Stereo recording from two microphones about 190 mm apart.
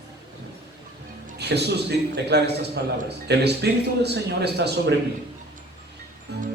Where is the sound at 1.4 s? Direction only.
60° right (ahead or behind).